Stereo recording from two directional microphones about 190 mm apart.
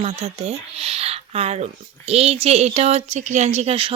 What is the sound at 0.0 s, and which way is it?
Speech, 35° right (ahead or behind).